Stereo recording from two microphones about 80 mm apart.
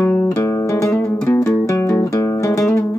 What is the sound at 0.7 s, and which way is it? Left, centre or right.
Music, left.